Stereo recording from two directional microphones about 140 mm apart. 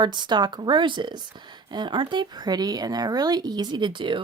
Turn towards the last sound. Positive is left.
turn(degrees=-35)  # may be behind; listen again after turning